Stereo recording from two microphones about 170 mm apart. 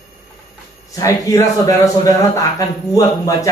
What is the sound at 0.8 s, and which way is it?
A man's voice, 20° left (ahead or behind).